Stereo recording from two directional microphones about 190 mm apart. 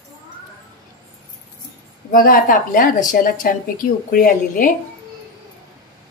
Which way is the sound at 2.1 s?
50° left (ahead or behind).